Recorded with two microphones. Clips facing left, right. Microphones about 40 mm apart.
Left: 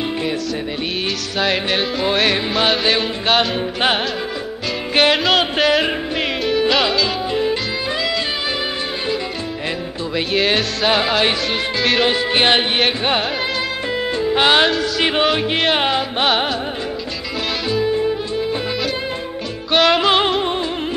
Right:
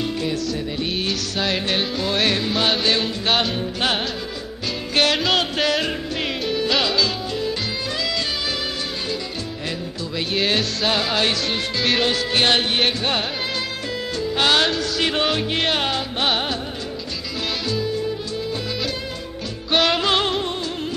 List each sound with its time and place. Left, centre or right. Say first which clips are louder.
1.4 s music: left 5 dB; centre
3.5 s music: left 4 dB; left
5.1 s music: left 4 dB; centre
5.7 s music: left 5 dB; left
10.3 s music: left 3 dB; centre
10.9 s music: left 5 dB; centre
14.1 s music: left 4 dB; left
17.6 s music: left 7 dB; left
19.7 s music: left 4 dB; centre
20.1 s music: left 5 dB; left